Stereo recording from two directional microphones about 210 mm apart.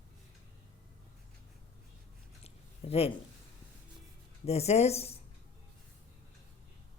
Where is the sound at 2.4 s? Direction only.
30° left (ahead or behind).